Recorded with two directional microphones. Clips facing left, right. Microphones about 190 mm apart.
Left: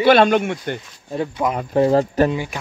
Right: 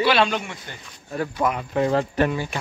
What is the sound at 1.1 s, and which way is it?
Speech, 15° left (ahead or behind).